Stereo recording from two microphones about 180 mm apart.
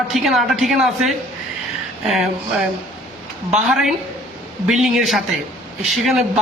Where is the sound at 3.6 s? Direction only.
Centre (ahead or behind).